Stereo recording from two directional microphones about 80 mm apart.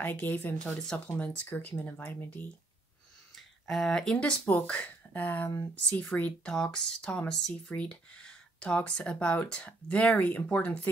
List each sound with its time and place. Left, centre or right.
0.0 s speech: left
0.7 s speech: centre
3.3 s speech: centre